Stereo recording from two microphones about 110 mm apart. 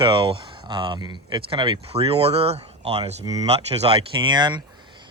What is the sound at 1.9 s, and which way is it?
Speech, 65° right (ahead or behind).